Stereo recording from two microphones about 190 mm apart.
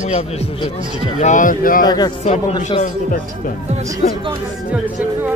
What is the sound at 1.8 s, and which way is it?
Speech, 20° left (ahead or behind).